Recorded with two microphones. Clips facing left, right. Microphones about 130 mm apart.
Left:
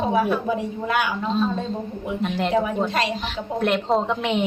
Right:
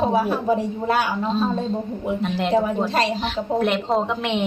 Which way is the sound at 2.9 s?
35° right (ahead or behind).